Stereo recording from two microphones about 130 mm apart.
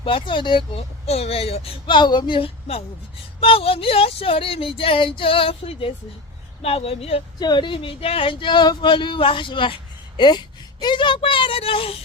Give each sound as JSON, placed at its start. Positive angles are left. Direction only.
{"t": 0.0, "sound": "speech", "side_deg": 40}
{"t": 1.0, "sound": "speech", "side_deg": 50}
{"t": 2.0, "sound": "speech", "side_deg": 35}
{"t": 7.3, "sound": "speech", "side_deg": 35}